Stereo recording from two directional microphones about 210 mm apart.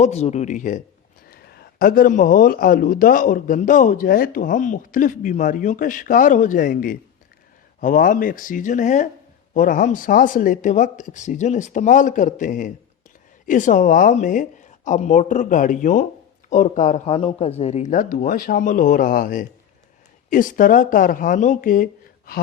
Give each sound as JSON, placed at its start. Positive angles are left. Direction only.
{"t": 0.0, "sound": "a man's voice", "side_deg": 30}
{"t": 1.3, "sound": "a man's voice", "side_deg": 50}